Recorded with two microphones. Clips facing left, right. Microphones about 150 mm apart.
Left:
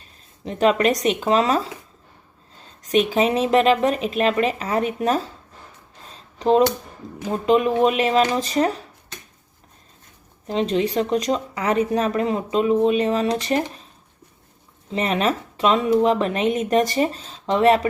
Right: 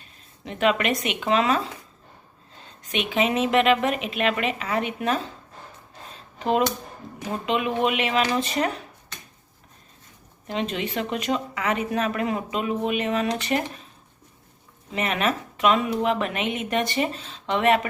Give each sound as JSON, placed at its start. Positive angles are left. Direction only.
{"t": 0.4, "sound": "speech", "side_deg": 35}
{"t": 2.9, "sound": "speech", "side_deg": 40}
{"t": 6.4, "sound": "speech", "side_deg": 30}
{"t": 10.4, "sound": "speech", "side_deg": 35}
{"t": 14.9, "sound": "speech", "side_deg": 30}